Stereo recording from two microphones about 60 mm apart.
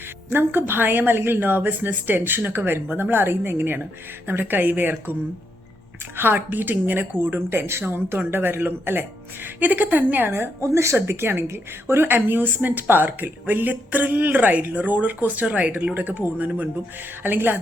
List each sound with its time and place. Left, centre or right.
0.3 s speech: right
6.1 s speech: right
17.2 s speech: right